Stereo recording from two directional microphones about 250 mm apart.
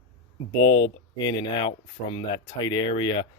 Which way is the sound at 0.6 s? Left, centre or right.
Centre.